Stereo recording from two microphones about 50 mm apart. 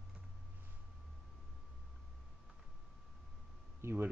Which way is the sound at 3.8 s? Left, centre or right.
Right.